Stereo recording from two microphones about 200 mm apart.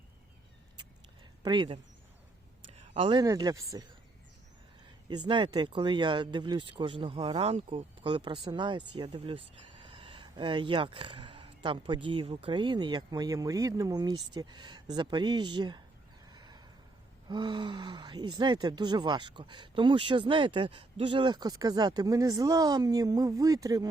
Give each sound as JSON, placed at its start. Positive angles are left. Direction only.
{"t": 1.4, "sound": "speech", "side_deg": -25}
{"t": 5.2, "sound": "speech", "side_deg": -20}
{"t": 16.3, "sound": "a sound", "side_deg": -20}
{"t": 17.2, "sound": "speech", "side_deg": -20}